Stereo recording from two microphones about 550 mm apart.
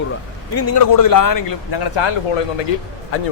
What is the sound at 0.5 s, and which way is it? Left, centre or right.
Speech, left.